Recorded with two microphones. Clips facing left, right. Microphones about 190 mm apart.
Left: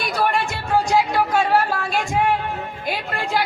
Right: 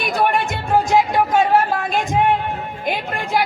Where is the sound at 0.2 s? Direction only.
20° right (ahead or behind).